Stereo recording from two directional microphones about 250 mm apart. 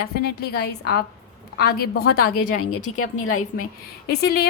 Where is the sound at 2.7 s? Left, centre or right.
Left.